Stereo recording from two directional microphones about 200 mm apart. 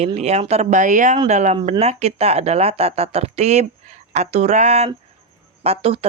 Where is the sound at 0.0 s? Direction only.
35° right (ahead or behind).